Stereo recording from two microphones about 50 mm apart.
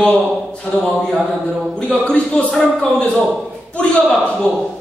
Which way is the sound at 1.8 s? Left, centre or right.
Left.